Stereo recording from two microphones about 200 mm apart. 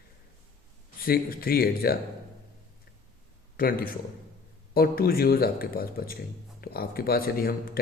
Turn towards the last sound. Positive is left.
turn(degrees=50)  # may be behind; listen again after turning